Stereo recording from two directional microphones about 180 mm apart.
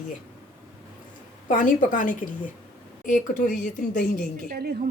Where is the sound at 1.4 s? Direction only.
45° left (ahead or behind).